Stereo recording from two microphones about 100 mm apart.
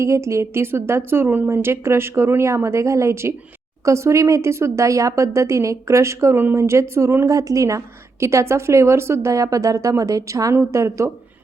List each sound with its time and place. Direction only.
0.0 s speech: 30° right (ahead or behind)